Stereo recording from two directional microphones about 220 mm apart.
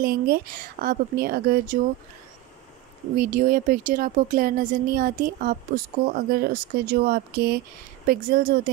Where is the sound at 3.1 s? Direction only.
40° right (ahead or behind).